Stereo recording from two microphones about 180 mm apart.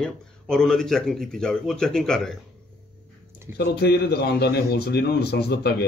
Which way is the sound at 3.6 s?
65° left (ahead or behind).